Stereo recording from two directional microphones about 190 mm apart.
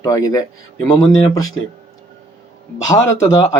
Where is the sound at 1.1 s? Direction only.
90° left.